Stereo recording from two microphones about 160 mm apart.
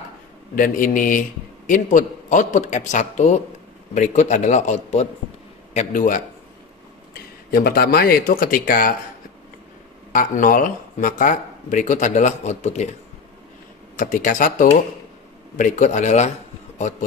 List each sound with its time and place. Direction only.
0.6 s speech: 55° left (ahead or behind)
7.5 s speech: 70° left (ahead or behind)
10.1 s speech: 60° left (ahead or behind)
13.9 s speech: 55° left (ahead or behind)